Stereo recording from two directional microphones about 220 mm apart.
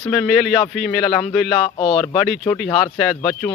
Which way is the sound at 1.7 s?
20° left (ahead or behind).